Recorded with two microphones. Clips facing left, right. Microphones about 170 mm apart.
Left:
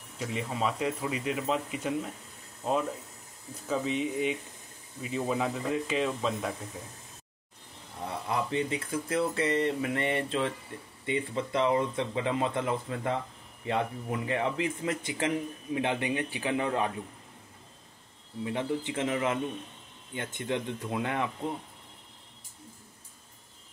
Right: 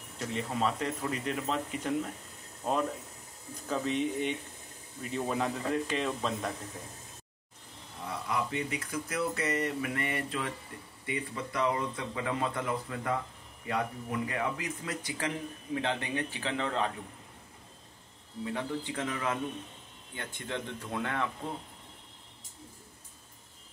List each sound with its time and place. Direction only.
0.2 s a man's voice: 5° left (ahead or behind)
8.3 s a man's voice: 30° left (ahead or behind); by 16.9 s 15° left (ahead or behind)
18.4 s a man's voice: 20° left (ahead or behind)